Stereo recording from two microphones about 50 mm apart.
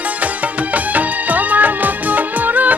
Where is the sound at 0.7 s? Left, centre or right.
Right.